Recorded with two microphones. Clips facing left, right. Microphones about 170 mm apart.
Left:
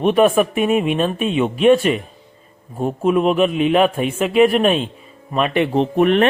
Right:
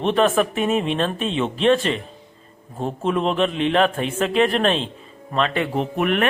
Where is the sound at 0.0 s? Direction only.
15° left (ahead or behind).